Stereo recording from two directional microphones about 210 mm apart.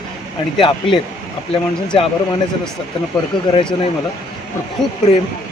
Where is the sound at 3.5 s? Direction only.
25° left (ahead or behind).